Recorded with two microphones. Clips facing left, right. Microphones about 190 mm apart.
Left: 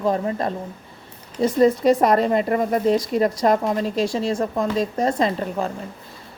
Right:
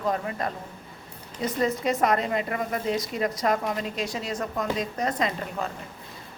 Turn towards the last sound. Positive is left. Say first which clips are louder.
# left 6 dB
turn(degrees=35)  # may be behind; listen again after turning